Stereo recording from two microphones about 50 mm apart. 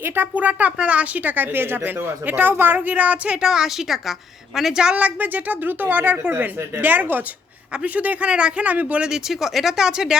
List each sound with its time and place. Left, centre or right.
0.0 s speech: right
0.3 s a woman's voice: right
3.2 s a woman's voice: centre
4.9 s a woman's voice: right
9.0 s a woman's voice: centre